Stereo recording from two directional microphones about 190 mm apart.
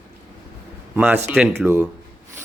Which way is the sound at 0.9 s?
10° right (ahead or behind).